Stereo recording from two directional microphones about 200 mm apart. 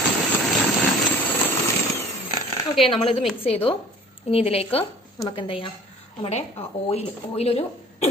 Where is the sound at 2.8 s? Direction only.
25° left (ahead or behind).